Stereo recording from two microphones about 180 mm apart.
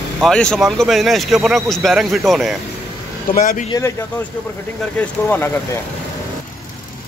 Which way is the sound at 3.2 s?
50° left (ahead or behind).